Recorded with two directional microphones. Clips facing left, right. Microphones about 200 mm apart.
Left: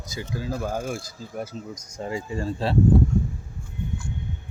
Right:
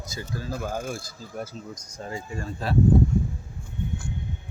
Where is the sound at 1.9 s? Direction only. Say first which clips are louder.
Left 5 dB; 20° left (ahead or behind).